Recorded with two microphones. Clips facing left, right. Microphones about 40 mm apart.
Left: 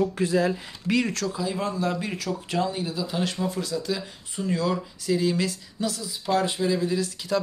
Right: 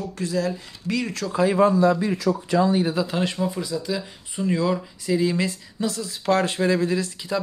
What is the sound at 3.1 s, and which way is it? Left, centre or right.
Speech, centre.